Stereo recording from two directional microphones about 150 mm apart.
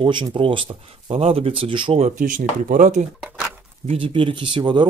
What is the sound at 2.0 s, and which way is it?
Speech, 60° right (ahead or behind).